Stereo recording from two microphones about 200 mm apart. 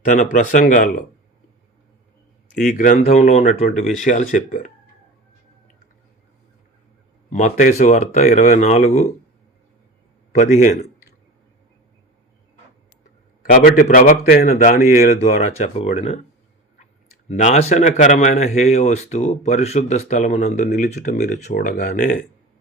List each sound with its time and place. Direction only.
0.0 s speech: 40° left (ahead or behind)
2.6 s speech: 40° left (ahead or behind)
7.3 s speech: 40° left (ahead or behind)
10.3 s speech: 35° left (ahead or behind)
13.4 s speech: 45° left (ahead or behind)
15.2 s speech: 30° left (ahead or behind)
17.2 s speech: 35° left (ahead or behind)